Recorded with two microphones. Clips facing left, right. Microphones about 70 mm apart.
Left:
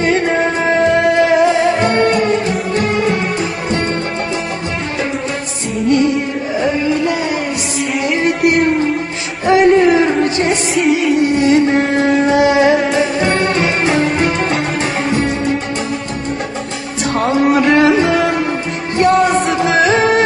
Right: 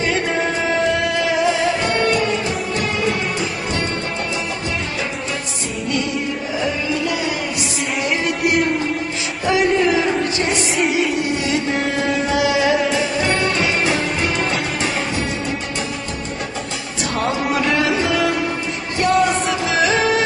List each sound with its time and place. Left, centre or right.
0.0 s music: left
6.6 s music: left
8.2 s a sound: left
9.5 s music: left
10.8 s music: centre
11.3 s a sound: left
13.2 s music: left
17.5 s music: left